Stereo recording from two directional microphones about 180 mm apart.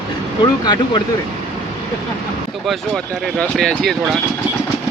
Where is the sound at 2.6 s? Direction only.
Centre (ahead or behind).